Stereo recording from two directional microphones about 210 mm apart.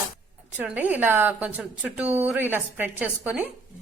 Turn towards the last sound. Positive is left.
turn(degrees=-5)  # may be behind; listen again after turning